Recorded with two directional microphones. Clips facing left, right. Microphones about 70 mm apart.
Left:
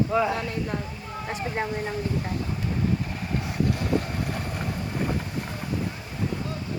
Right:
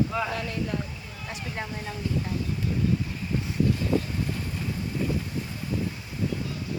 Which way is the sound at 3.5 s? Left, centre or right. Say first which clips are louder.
Right 1 dB; left.